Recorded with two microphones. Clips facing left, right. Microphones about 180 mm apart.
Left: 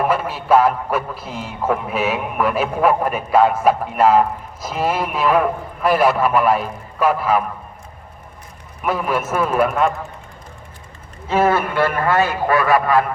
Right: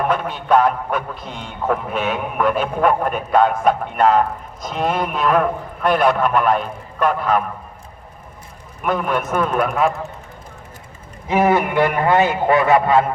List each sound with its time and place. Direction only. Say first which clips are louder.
0.0 s a man's voice: left 1 dB; 5° left (ahead or behind)
8.8 s a man's voice: even; 5° left (ahead or behind)
11.3 s a man's voice: right 1 dB; 15° right (ahead or behind)